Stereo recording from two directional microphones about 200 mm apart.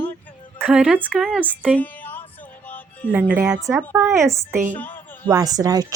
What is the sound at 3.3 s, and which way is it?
Speech, 10° right (ahead or behind).